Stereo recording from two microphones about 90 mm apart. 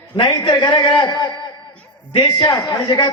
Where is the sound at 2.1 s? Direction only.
45° left (ahead or behind).